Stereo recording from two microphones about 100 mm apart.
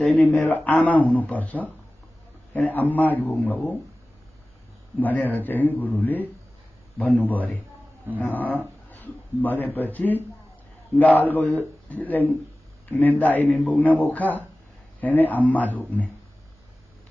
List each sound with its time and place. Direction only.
0.0 s speech: 15° left (ahead or behind)
4.9 s a man's voice: 15° left (ahead or behind)